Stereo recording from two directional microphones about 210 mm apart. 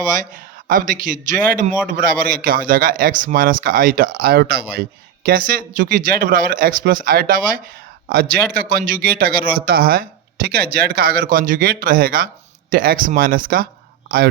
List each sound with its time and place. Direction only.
0.0 s a man's voice: 40° right (ahead or behind)